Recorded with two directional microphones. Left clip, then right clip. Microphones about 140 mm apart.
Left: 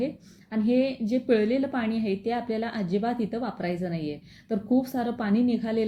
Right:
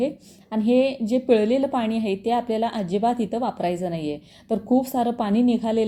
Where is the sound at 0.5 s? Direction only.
30° right (ahead or behind).